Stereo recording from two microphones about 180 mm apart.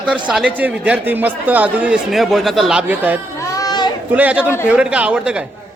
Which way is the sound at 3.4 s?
20° left (ahead or behind).